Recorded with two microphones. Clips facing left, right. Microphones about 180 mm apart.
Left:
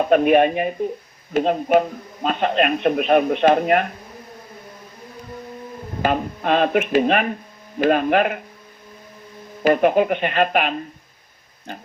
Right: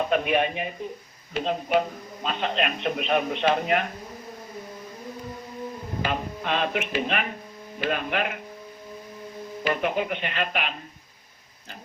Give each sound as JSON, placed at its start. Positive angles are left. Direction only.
{"t": 0.1, "sound": "speech", "side_deg": 50}
{"t": 6.0, "sound": "speech", "side_deg": 45}
{"t": 9.6, "sound": "speech", "side_deg": 50}